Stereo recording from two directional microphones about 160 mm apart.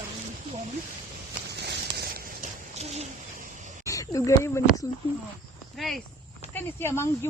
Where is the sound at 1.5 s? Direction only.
90° right.